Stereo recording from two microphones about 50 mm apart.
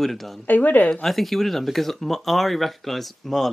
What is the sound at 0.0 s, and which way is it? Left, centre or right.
Speech, centre.